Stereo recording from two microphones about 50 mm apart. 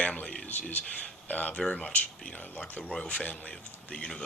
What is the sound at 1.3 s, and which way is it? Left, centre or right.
Speech, left.